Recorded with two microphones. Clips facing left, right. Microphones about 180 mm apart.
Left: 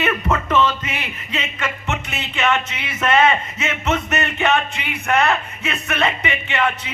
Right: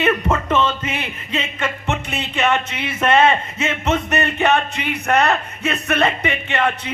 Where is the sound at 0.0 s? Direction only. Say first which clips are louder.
Right 2 dB; 30° right (ahead or behind).